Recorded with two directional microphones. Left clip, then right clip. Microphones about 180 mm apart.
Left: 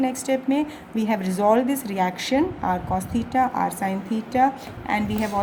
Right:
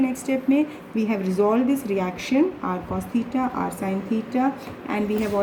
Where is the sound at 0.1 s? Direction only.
55° left (ahead or behind).